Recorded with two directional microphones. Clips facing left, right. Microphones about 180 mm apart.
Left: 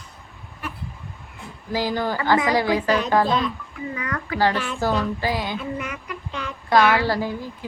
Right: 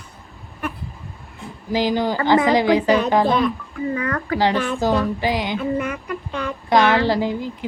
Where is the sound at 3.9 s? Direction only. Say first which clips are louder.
Right 5 dB; 45° right (ahead or behind).